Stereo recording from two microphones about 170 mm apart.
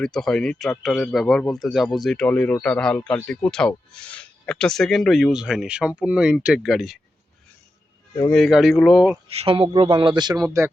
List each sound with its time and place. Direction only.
0.0 s speech: 5° left (ahead or behind)
8.3 s speech: centre (ahead or behind)
9.4 s speech: 35° right (ahead or behind)